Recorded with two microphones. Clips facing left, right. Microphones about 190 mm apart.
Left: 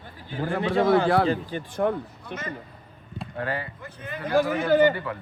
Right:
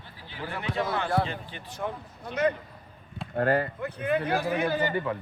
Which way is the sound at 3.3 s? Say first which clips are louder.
Right 6 dB; 50° right (ahead or behind).